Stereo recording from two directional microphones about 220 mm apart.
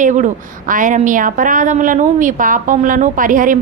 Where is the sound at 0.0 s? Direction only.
35° right (ahead or behind).